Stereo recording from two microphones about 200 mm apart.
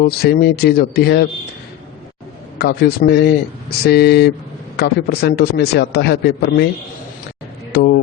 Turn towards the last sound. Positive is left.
turn(degrees=50)  # may be behind; listen again after turning